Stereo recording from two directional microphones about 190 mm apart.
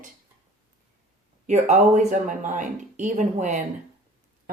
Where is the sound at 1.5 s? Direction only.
35° right (ahead or behind).